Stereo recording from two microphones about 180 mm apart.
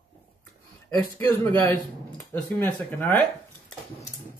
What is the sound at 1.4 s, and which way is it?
Speech, 15° left (ahead or behind).